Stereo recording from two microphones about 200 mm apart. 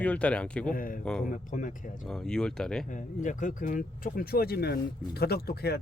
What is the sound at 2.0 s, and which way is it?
Speech, centre (ahead or behind).